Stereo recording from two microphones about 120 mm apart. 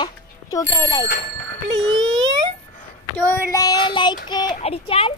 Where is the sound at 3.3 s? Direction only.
30° left (ahead or behind).